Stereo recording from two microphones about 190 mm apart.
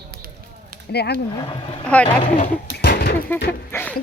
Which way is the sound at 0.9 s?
60° left (ahead or behind).